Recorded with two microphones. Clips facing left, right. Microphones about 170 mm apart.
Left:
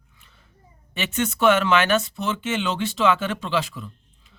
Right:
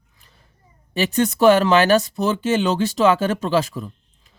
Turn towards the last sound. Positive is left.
turn(degrees=-40)  # may be behind; listen again after turning